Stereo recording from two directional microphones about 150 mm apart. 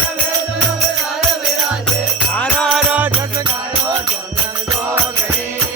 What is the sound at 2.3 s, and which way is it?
Music, 10° left (ahead or behind).